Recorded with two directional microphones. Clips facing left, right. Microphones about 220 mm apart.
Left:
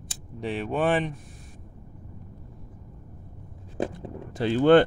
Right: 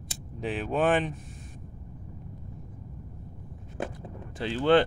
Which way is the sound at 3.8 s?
35° left (ahead or behind).